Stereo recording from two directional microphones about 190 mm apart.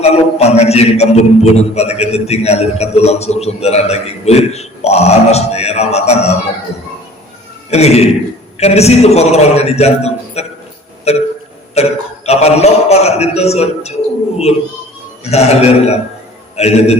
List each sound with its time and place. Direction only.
0.0 s a man's voice: 35° left (ahead or behind)
7.7 s a man's voice: 35° left (ahead or behind)
15.2 s a man's voice: 35° left (ahead or behind)